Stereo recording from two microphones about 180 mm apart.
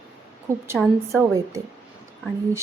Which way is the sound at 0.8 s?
Centre (ahead or behind).